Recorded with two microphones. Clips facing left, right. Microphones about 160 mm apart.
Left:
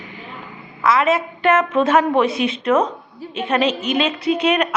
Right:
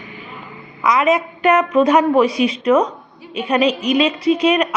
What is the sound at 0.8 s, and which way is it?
A woman's voice, 15° right (ahead or behind).